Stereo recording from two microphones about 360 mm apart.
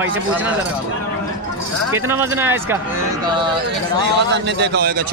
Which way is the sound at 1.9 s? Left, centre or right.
Centre.